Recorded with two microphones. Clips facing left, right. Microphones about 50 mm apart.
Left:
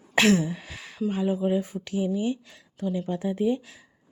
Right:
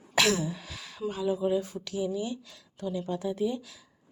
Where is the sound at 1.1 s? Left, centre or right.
Left.